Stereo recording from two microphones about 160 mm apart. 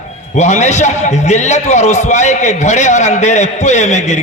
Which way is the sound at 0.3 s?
45° left (ahead or behind).